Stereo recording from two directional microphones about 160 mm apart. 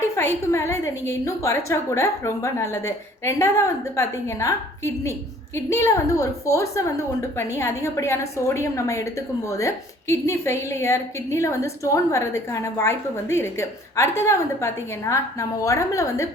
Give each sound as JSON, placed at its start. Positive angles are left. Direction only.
{"t": 0.2, "sound": "a woman's voice", "side_deg": 15}